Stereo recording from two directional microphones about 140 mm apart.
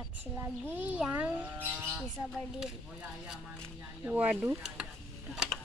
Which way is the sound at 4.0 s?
15° right (ahead or behind).